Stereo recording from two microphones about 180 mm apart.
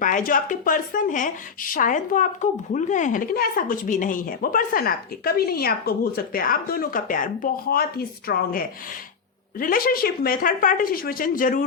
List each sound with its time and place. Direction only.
0.0 s speech: 50° left (ahead or behind)